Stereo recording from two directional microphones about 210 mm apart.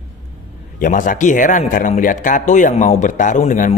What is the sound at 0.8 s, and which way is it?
A man's voice, 40° left (ahead or behind).